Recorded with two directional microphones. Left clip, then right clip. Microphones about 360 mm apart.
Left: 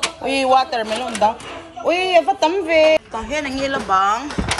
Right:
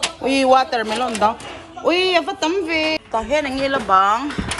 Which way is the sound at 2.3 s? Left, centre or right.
Centre.